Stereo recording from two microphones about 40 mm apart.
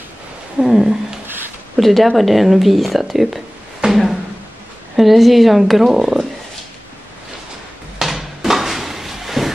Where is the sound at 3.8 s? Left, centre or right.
Right.